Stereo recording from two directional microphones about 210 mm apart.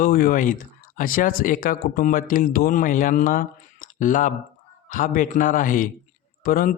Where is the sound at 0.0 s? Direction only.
40° left (ahead or behind).